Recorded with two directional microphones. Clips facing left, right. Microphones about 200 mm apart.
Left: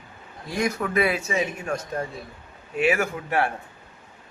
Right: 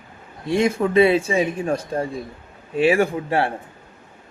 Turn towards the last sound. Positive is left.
turn(degrees=-30)  # may be behind; listen again after turning